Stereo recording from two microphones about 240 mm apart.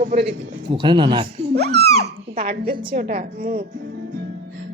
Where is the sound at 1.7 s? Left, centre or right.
Right.